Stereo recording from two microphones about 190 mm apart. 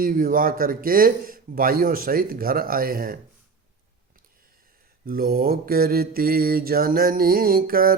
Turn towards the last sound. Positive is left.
turn(degrees=-50)  # may be behind; listen again after turning